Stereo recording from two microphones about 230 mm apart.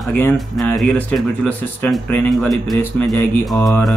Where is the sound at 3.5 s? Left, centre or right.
Centre.